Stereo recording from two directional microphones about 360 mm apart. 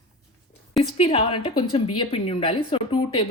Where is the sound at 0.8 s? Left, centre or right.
Centre.